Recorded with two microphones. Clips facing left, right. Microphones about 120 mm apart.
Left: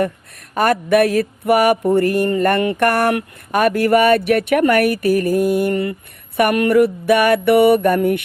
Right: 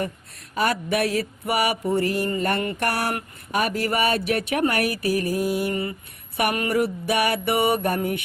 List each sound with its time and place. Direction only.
0.5 s mantra: 55° left (ahead or behind)